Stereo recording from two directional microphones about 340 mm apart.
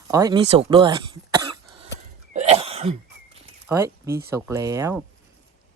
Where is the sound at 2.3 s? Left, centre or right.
Centre.